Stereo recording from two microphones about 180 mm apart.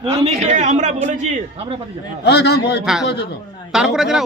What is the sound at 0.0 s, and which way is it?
A man's voice, 35° right (ahead or behind).